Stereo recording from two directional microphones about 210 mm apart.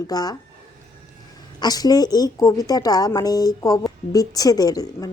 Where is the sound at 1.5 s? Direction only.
20° left (ahead or behind).